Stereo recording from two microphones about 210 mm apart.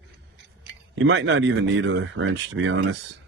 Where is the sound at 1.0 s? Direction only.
60° right (ahead or behind).